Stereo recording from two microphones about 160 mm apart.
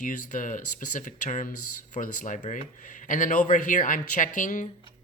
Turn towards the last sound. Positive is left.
turn(degrees=50)  # may be behind; listen again after turning